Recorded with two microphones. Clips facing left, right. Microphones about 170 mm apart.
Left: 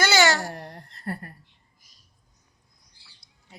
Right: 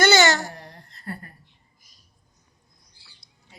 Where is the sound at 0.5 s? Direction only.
50° left (ahead or behind).